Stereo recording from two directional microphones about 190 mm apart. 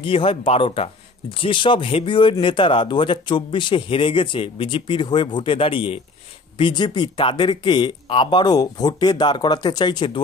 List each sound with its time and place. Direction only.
0.0 s speech: 30° left (ahead or behind)